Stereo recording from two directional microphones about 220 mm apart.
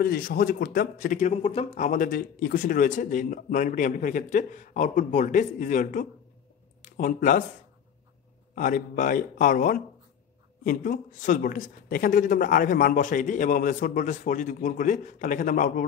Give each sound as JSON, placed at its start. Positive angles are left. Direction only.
{"t": 0.0, "sound": "speech", "side_deg": 45}
{"t": 8.5, "sound": "speech", "side_deg": 35}